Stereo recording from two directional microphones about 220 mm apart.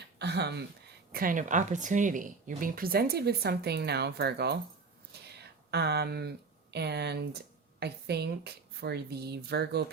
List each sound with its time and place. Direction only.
0.2 s speech: 50° right (ahead or behind)
1.1 s speech: 40° right (ahead or behind)